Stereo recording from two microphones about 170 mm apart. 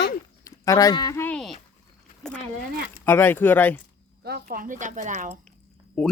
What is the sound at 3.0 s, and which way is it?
Speech, 10° left (ahead or behind).